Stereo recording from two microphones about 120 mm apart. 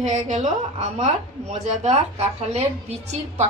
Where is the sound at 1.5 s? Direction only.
65° right (ahead or behind).